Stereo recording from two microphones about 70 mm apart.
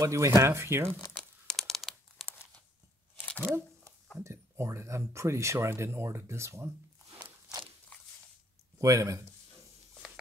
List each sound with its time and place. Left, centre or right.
0.0 s speech: right
1.5 s crumpling: centre
3.3 s a sound: right
4.2 s speech: right
8.7 s speech: right